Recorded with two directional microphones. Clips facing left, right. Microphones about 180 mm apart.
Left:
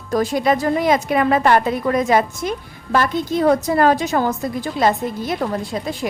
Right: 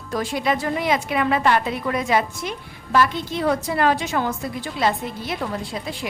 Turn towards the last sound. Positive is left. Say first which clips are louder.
# left 5 dB
turn(degrees=45)  # may be behind; listen again after turning